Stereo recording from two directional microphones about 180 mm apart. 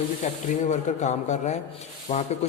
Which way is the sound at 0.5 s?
40° left (ahead or behind).